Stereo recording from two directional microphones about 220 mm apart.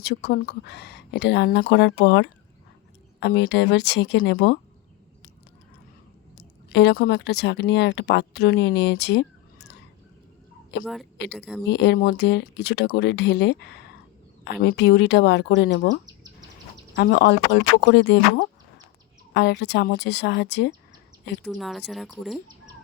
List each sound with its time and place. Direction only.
0.0 s speech: 45° left (ahead or behind)
6.3 s speech: 50° left (ahead or behind)
11.3 s speech: centre (ahead or behind)
11.7 s speech: 50° left (ahead or behind)
21.4 s speech: centre (ahead or behind)